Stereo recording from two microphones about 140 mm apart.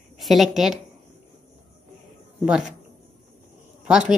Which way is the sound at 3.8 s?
5° right (ahead or behind).